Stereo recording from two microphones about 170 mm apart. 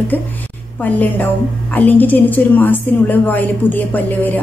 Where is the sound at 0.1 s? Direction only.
10° left (ahead or behind).